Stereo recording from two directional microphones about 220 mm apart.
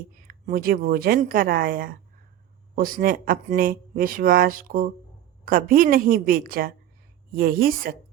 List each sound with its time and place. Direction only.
0.3 s speech: 40° right (ahead or behind)